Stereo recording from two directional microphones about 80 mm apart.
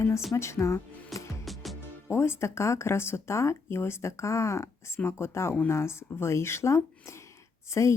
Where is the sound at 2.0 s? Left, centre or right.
Left.